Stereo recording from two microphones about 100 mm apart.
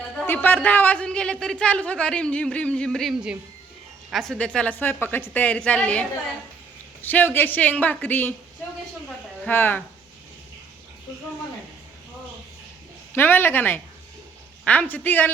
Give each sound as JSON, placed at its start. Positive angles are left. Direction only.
{"t": 0.3, "sound": "a woman's voice", "side_deg": 20}
{"t": 9.5, "sound": "speech", "side_deg": 20}
{"t": 13.1, "sound": "a woman's voice", "side_deg": 20}